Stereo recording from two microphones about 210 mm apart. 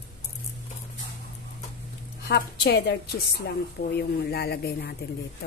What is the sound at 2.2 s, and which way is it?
A woman's voice, 50° left (ahead or behind).